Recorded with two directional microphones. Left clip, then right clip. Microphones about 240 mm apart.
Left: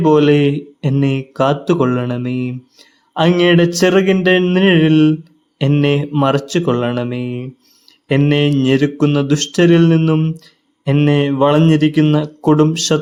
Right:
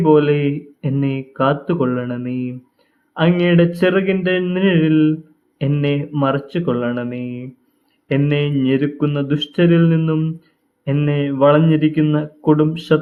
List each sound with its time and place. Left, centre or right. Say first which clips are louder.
0.0 s speech: left 2 dB; left